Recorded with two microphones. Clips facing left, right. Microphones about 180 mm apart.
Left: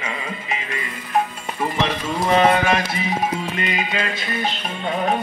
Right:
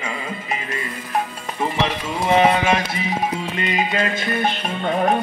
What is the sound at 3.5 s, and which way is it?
Music, 40° right (ahead or behind).